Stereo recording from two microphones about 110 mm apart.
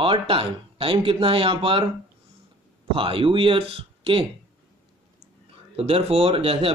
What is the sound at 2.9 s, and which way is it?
Speech, 55° right (ahead or behind).